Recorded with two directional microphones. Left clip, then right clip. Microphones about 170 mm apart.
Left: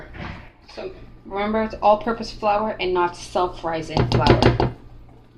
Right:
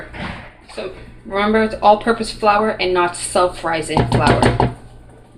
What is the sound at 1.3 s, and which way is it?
Speech, 10° left (ahead or behind).